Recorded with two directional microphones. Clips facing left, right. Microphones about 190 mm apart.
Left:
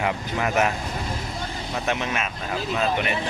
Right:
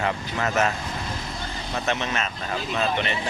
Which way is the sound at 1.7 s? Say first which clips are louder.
Even; 10° left (ahead or behind).